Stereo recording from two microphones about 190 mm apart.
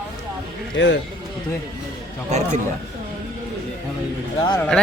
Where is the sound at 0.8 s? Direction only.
70° left (ahead or behind).